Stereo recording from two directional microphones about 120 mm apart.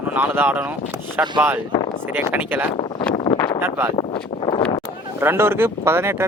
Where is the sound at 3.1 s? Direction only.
45° left (ahead or behind).